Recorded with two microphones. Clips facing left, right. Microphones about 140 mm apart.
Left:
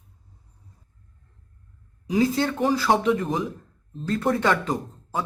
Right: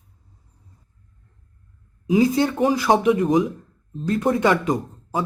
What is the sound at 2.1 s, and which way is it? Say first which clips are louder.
A man's voice: right 4 dB; 10° right (ahead or behind).